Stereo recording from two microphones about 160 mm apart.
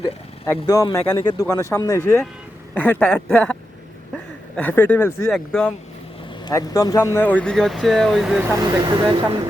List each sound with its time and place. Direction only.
0.4 s speech: 20° left (ahead or behind)
2.7 s speech: 10° left (ahead or behind)
5.3 s speech: 5° left (ahead or behind)
6.4 s speech: 25° left (ahead or behind); by 8.4 s centre (ahead or behind)
8.6 s speech: 25° right (ahead or behind)